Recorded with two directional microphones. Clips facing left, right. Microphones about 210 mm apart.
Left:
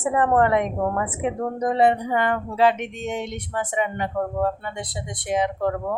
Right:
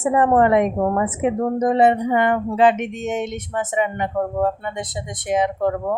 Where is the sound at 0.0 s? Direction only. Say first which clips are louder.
Right 3 dB; 20° right (ahead or behind).